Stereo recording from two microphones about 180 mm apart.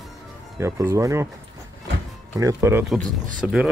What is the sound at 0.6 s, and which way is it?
Speech, 15° right (ahead or behind).